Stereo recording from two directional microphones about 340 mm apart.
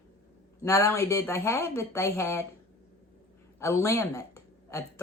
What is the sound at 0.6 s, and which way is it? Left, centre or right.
Speech, centre.